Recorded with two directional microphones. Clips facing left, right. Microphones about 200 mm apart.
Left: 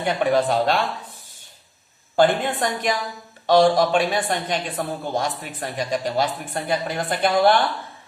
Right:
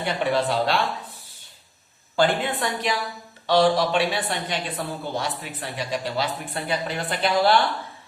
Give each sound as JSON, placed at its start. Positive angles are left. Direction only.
{"t": 0.0, "sound": "a woman's voice", "side_deg": 45}
{"t": 2.1, "sound": "a woman's voice", "side_deg": 50}